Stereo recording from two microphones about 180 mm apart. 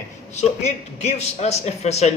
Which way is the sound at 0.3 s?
40° left (ahead or behind).